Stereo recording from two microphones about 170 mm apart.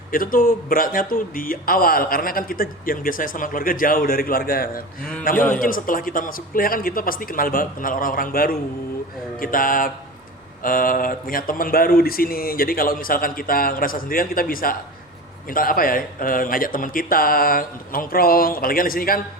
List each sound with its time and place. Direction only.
0.1 s a man's voice: 55° left (ahead or behind)